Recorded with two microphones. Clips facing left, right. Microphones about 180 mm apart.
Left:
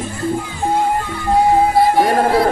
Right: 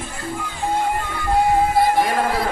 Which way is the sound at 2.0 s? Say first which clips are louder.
Left 6 dB; 40° left (ahead or behind).